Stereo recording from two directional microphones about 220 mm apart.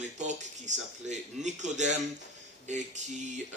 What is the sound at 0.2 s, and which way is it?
Speech, 35° right (ahead or behind).